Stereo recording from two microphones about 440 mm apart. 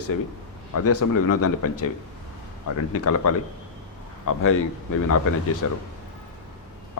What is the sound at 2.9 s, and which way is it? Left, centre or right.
Speech, left.